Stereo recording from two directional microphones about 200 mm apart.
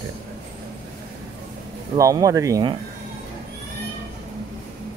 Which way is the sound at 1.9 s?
15° right (ahead or behind).